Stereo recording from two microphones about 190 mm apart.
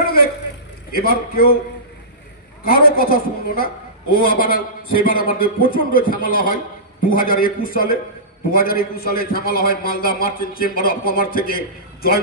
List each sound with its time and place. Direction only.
0.9 s a woman's voice: 50° left (ahead or behind)
2.6 s a woman's voice: 50° left (ahead or behind)